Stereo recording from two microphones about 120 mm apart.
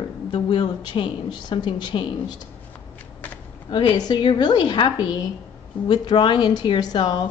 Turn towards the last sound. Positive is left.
turn(degrees=40)  # may be behind; listen again after turning